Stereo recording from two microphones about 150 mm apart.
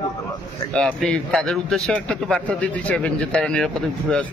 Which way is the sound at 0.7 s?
5° left (ahead or behind).